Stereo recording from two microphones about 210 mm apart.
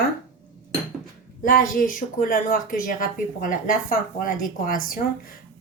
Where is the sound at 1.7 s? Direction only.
40° left (ahead or behind).